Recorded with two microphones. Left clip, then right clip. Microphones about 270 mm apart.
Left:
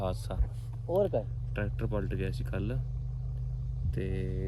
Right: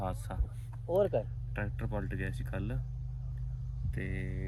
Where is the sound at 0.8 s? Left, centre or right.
Right.